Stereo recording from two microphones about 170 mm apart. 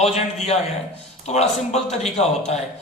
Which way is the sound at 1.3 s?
40° left (ahead or behind).